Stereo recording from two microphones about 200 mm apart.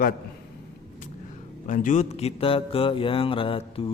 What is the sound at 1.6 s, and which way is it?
Speech, 40° left (ahead or behind).